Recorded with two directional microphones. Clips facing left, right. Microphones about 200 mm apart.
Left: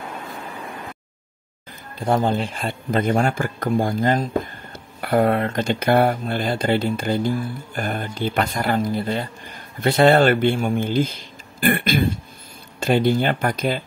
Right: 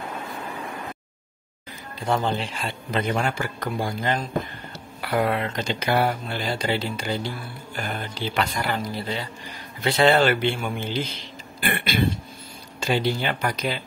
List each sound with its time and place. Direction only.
2.0 s speech: 50° left (ahead or behind)